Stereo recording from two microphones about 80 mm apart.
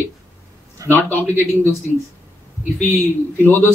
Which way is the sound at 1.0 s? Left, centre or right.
Left.